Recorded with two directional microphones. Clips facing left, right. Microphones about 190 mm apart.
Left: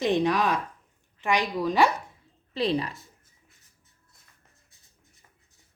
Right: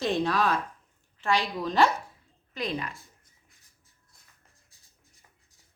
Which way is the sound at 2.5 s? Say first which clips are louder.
Left 6 dB; 30° left (ahead or behind).